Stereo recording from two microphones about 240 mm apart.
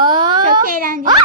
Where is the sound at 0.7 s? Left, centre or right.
Right.